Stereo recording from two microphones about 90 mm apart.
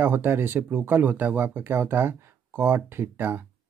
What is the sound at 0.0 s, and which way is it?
Speech, 25° right (ahead or behind).